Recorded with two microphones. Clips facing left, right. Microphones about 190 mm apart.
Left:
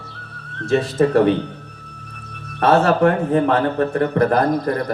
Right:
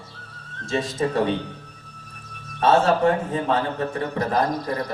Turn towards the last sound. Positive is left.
turn(degrees=55)  # may be behind; listen again after turning